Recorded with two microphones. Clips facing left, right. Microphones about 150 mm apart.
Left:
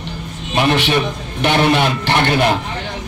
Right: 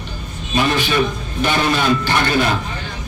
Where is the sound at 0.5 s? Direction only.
65° left (ahead or behind).